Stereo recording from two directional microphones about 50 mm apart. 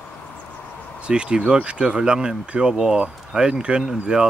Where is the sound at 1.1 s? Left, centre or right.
Centre.